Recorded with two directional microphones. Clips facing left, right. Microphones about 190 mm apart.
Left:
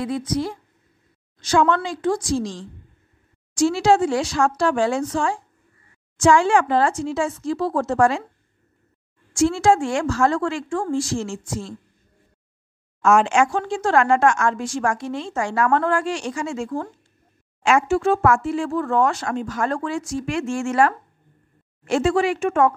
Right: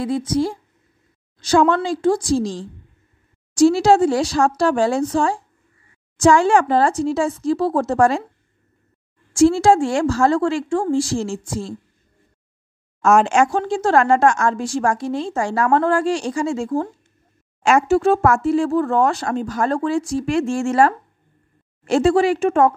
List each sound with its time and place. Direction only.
0.0 s a woman's voice: 30° right (ahead or behind)
9.3 s speech: 35° right (ahead or behind)
13.0 s speech: 40° right (ahead or behind)